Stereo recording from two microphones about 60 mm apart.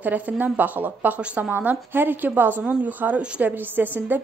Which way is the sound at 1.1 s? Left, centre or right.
Centre.